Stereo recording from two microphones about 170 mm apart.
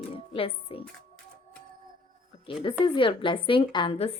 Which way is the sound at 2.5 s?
30° left (ahead or behind).